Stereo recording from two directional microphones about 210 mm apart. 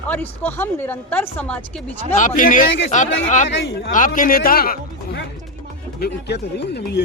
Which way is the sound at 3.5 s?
60° left (ahead or behind).